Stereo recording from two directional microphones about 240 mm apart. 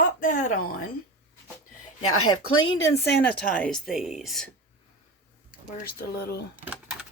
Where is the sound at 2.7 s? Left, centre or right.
Centre.